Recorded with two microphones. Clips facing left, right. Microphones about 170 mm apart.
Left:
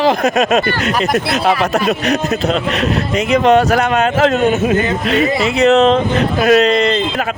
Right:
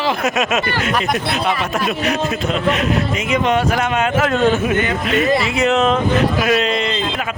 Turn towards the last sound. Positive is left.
turn(degrees=40)  # may be behind; listen again after turning